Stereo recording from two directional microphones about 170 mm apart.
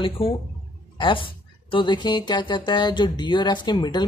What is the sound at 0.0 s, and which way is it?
Speech, 35° left (ahead or behind).